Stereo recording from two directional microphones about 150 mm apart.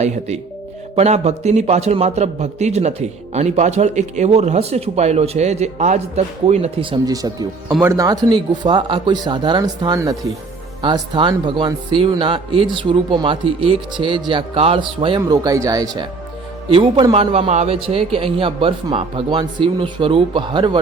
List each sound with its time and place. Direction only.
0.9 s a man's voice: 45° right (ahead or behind)
7.0 s speech: 25° right (ahead or behind)
15.2 s speech: 20° right (ahead or behind)
16.6 s speech: 35° right (ahead or behind)